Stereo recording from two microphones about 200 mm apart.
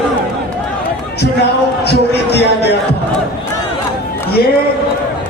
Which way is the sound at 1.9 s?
55° left (ahead or behind).